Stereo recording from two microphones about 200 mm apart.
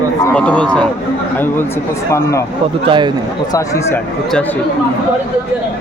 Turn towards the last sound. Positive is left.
turn(degrees=15)  # may be behind; listen again after turning